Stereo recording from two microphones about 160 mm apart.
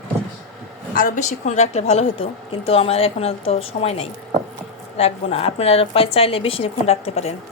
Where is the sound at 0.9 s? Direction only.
55° left (ahead or behind).